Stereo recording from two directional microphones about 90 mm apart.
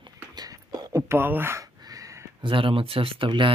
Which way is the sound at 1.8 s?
45° right (ahead or behind).